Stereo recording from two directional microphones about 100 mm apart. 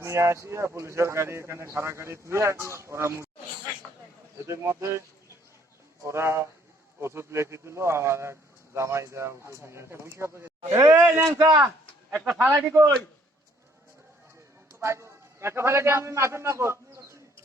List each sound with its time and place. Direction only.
0.0 s a man's voice: 30° right (ahead or behind)
4.4 s a man's voice: 25° right (ahead or behind)
12.1 s speech: 15° right (ahead or behind)
12.5 s a man's voice: 30° right (ahead or behind)
14.7 s a man's voice: 30° right (ahead or behind)